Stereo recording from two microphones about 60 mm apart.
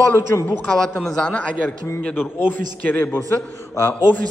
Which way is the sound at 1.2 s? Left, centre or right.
Centre.